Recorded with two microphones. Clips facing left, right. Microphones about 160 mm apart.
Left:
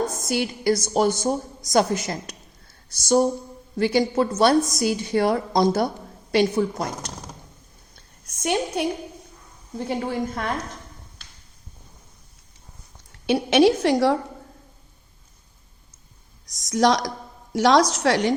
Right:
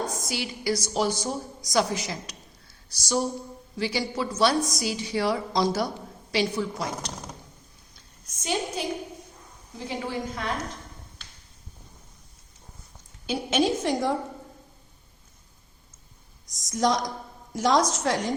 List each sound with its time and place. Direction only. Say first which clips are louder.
0.1 s a woman's voice: left 7 dB; 50° left (ahead or behind)
7.9 s a sound: left 2 dB; 60° left (ahead or behind)
9.7 s a woman's voice: left 6 dB; 55° left (ahead or behind)
13.2 s a woman's voice: left 8 dB; 70° left (ahead or behind)
16.5 s a woman's voice: left 5 dB; 75° left (ahead or behind)